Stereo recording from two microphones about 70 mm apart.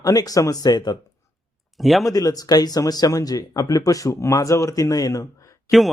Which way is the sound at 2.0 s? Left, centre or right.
Left.